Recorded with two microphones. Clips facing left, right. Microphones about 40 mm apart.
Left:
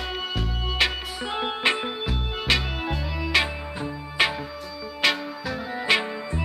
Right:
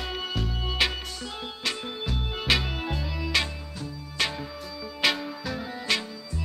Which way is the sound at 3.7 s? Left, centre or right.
Left.